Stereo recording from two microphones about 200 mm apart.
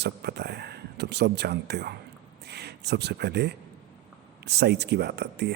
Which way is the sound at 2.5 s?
55° right (ahead or behind).